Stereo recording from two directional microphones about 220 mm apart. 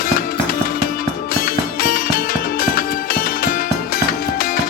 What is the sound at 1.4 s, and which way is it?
Music, 40° left (ahead or behind).